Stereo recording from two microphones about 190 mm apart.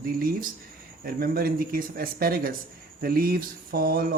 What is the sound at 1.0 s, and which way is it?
Speech, 50° right (ahead or behind).